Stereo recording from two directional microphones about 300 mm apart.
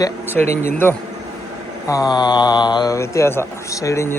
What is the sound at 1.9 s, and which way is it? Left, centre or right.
Speech, centre.